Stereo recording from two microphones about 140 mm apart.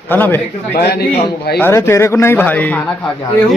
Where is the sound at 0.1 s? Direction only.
15° left (ahead or behind).